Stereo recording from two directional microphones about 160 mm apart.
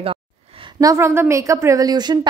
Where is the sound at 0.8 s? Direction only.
20° right (ahead or behind).